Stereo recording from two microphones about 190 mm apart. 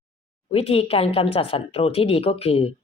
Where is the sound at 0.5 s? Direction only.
30° left (ahead or behind).